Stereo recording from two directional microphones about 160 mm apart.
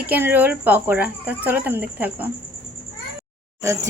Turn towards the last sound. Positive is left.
turn(degrees=-20)  # may be behind; listen again after turning